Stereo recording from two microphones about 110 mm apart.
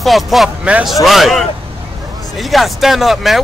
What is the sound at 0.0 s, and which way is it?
Speech, centre (ahead or behind).